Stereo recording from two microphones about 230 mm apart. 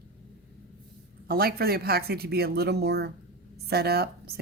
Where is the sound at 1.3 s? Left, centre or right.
Right.